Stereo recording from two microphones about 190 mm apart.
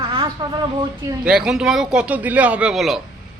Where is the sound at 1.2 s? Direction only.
5° right (ahead or behind).